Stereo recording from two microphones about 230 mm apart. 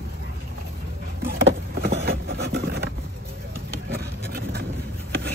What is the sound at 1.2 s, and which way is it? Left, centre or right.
Vehicle, right.